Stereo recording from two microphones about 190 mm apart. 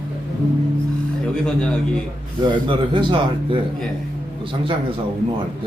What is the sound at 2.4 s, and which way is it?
Speech, 25° right (ahead or behind).